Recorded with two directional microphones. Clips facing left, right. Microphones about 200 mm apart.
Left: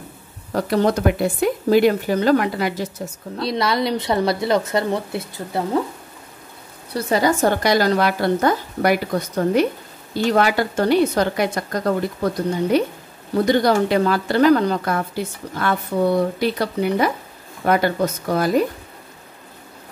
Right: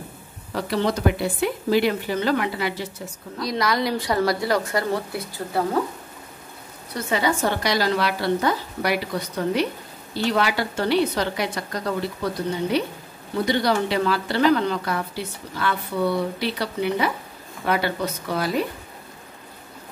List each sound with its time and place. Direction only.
0.5 s a woman's voice: 45° left (ahead or behind)
3.3 s a woman's voice: 25° left (ahead or behind)
6.9 s a woman's voice: 35° left (ahead or behind)
13.5 s a woman's voice: 45° left (ahead or behind)